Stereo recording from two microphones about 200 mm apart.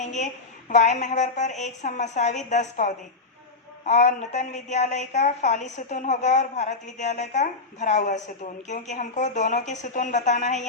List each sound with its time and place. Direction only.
0.0 s a woman's voice: 35° left (ahead or behind)